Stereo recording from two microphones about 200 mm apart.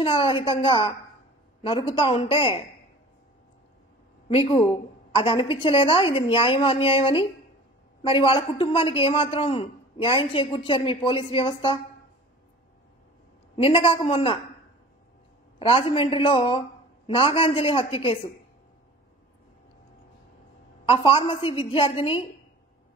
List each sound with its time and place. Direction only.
0.0 s a woman's voice: 25° left (ahead or behind)
4.3 s a woman's voice: 25° left (ahead or behind)
13.6 s a woman's voice: 25° left (ahead or behind)
15.6 s a woman's voice: 25° left (ahead or behind)
20.8 s a woman's voice: 30° left (ahead or behind)